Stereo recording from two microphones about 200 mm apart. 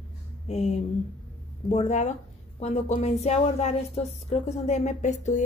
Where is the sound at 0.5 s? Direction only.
35° left (ahead or behind).